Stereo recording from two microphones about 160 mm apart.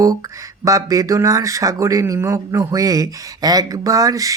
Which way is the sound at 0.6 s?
20° right (ahead or behind).